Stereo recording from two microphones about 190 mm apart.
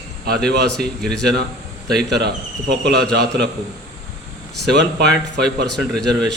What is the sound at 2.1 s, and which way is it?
Speech, 60° right (ahead or behind).